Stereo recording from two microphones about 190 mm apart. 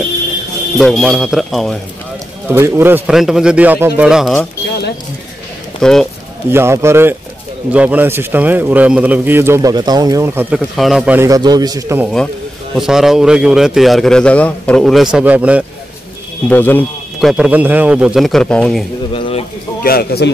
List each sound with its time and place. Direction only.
0.7 s a man's voice: centre (ahead or behind)
2.4 s a man's voice: 10° right (ahead or behind)
5.8 s speech: 5° left (ahead or behind)
6.5 s a man's voice: 15° right (ahead or behind)
10.8 s a man's voice: centre (ahead or behind)
11.1 s a man's voice: 20° right (ahead or behind)
12.7 s a man's voice: centre (ahead or behind)
16.4 s speech: 10° left (ahead or behind)
17.3 s a man's voice: 5° right (ahead or behind)
19.1 s a sound: 30° left (ahead or behind)
19.8 s a man's voice: 55° left (ahead or behind)